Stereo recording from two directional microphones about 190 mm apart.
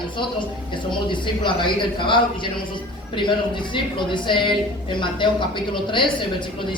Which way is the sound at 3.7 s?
25° left (ahead or behind).